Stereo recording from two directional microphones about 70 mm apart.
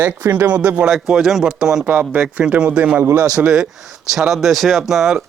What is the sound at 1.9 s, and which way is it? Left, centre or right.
Speech, centre.